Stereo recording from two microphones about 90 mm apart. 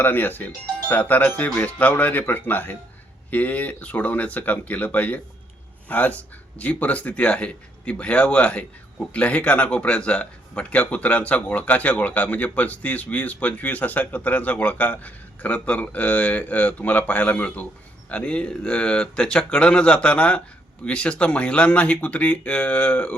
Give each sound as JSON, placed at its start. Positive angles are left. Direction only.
{"t": 0.0, "sound": "speech", "side_deg": 20}